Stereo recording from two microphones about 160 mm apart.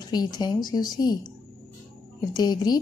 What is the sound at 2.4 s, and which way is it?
Speech, 25° left (ahead or behind).